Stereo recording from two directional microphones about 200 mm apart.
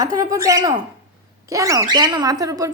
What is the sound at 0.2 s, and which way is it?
Speech, 15° right (ahead or behind).